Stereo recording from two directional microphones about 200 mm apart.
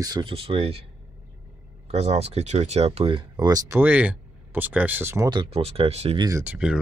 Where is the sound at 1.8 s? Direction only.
30° right (ahead or behind).